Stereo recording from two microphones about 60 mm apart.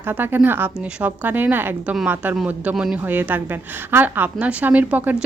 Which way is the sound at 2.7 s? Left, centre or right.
Centre.